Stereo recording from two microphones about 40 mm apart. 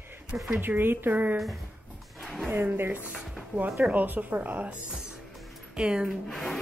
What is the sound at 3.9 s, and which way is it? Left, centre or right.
Speech, right.